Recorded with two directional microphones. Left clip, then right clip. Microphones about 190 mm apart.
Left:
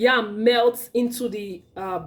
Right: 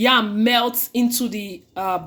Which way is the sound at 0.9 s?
40° right (ahead or behind).